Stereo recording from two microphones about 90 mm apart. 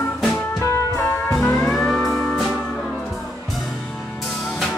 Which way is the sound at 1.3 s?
10° left (ahead or behind).